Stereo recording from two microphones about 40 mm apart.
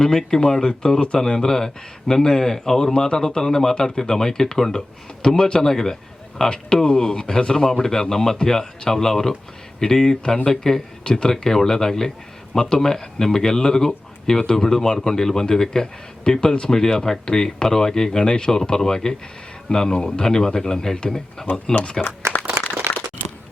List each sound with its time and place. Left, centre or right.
0.0 s a man's voice: centre
21.5 s speech: left
22.2 s applause: right
22.8 s a sound: right